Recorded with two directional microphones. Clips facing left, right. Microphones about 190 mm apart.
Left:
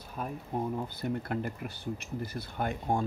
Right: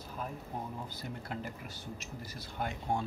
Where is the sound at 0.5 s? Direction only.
60° left (ahead or behind).